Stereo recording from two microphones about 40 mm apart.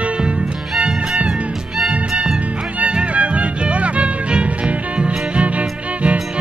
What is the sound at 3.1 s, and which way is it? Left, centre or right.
Music, right.